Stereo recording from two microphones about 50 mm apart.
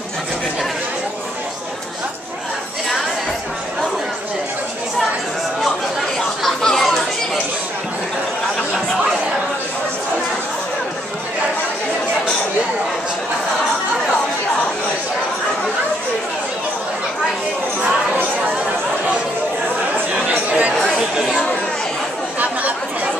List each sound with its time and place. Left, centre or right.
6.1 s chatter: centre
20.2 s chatter: right
22.4 s chatter: right